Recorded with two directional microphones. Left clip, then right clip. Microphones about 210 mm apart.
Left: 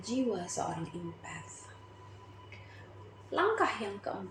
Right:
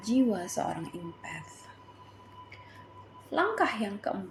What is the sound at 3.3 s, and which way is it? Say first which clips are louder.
Speech: right 2 dB; 30° right (ahead or behind).